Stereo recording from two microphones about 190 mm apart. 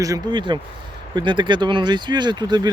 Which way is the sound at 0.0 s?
20° right (ahead or behind).